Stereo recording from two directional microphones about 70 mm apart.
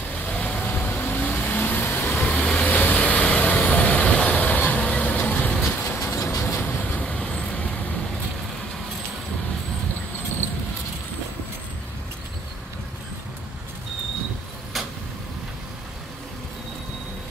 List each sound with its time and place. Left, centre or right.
0.1 s vehicle: centre
2.1 s vehicle: centre
5.9 s train: left
6.3 s vehicle: left
6.6 s vehicle: left